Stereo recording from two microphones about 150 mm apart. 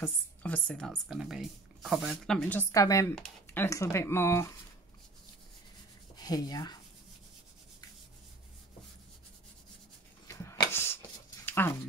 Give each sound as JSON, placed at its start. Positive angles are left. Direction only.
{"t": 0.0, "sound": "speech", "side_deg": 10}
{"t": 2.7, "sound": "speech", "side_deg": 20}
{"t": 6.1, "sound": "speech", "side_deg": 25}
{"t": 10.2, "sound": "a sound", "side_deg": 20}